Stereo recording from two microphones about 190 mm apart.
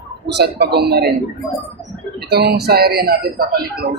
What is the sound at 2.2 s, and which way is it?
A man's voice, 55° right (ahead or behind).